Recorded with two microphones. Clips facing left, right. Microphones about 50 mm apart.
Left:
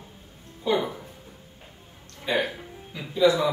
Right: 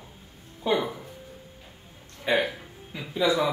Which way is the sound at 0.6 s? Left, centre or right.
Right.